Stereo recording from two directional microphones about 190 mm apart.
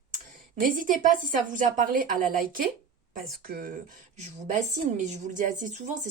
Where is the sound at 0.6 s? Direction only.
45° right (ahead or behind).